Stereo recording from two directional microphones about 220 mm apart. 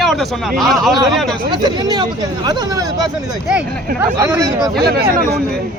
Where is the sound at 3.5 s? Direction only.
10° right (ahead or behind).